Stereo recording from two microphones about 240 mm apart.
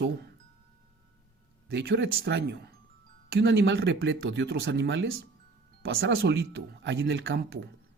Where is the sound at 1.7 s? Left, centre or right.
Right.